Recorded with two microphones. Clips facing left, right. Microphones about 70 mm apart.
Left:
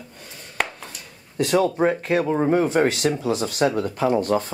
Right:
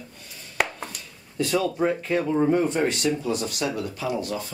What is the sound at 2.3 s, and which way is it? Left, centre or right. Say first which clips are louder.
Speech: left 1 dB; left.